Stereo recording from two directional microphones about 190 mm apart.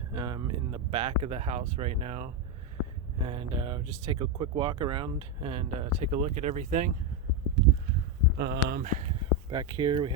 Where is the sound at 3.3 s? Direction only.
25° right (ahead or behind).